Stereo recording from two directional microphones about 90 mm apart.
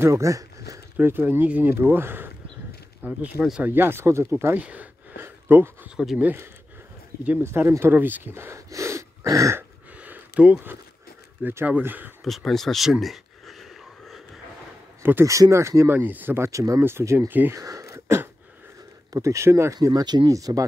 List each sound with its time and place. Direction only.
0.0 s speech: 35° right (ahead or behind)
0.9 s speech: 20° right (ahead or behind)
3.0 s speech: 10° right (ahead or behind)
3.6 s speech: 25° right (ahead or behind)
4.6 s a sound: 15° right (ahead or behind)
6.1 s speech: 20° right (ahead or behind)
9.6 s a sound: 20° right (ahead or behind)
11.4 s speech: 20° right (ahead or behind)
12.3 s speech: centre (ahead or behind)
15.0 s speech: 25° right (ahead or behind)
16.4 s speech: 35° right (ahead or behind)
17.3 s speech: 20° right (ahead or behind)
17.6 s a sound: 40° right (ahead or behind)
19.1 s speech: 35° right (ahead or behind)